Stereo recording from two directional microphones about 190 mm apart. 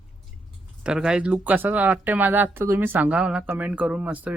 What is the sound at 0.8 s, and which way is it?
Speech, 5° right (ahead or behind).